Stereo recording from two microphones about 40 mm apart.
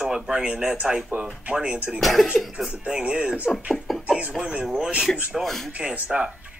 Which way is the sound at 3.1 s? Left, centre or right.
Centre.